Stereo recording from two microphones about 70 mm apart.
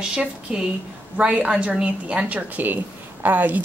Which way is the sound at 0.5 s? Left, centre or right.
Centre.